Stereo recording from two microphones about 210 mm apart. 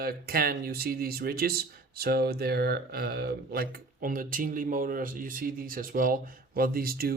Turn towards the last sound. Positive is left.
turn(degrees=-45)  # may be behind; listen again after turning